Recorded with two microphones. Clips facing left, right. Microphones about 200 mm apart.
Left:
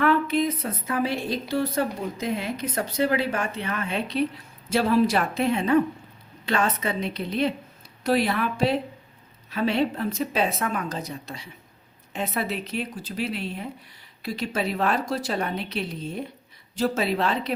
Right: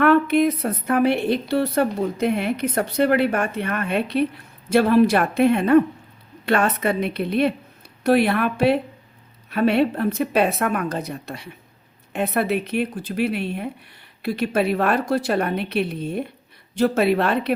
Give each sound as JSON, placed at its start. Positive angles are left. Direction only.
{"t": 0.0, "sound": "a woman's voice", "side_deg": -60}